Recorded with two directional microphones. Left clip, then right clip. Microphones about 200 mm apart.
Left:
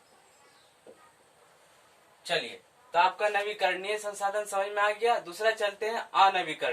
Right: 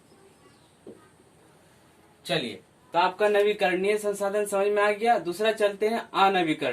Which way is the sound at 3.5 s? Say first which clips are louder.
Right 5 dB; 35° right (ahead or behind).